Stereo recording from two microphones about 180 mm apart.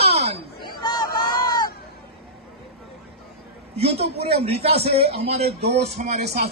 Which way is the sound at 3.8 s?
35° right (ahead or behind).